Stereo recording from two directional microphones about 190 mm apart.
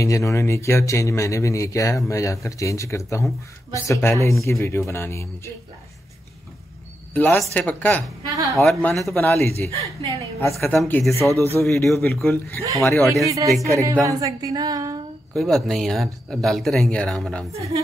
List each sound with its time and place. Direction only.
0.0 s speech: 15° left (ahead or behind)
7.2 s speech: 10° left (ahead or behind)
11.1 s speech: 15° right (ahead or behind)
11.5 s speech: 10° left (ahead or behind)
11.9 s speech: centre (ahead or behind)
12.7 s speech: 15° left (ahead or behind)
13.2 s speech: 15° right (ahead or behind)
15.3 s speech: centre (ahead or behind)